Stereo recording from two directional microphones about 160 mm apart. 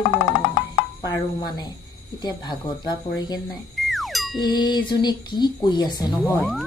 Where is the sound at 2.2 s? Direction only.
25° left (ahead or behind).